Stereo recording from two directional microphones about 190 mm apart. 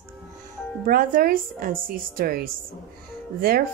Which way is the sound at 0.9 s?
45° right (ahead or behind).